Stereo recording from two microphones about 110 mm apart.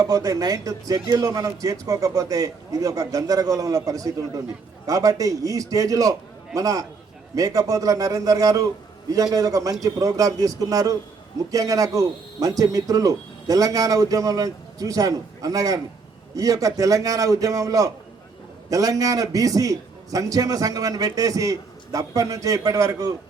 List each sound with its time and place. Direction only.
0.0 s a man's voice: 35° right (ahead or behind)